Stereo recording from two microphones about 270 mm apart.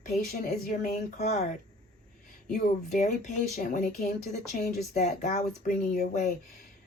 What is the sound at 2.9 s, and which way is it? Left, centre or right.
A woman's voice, left.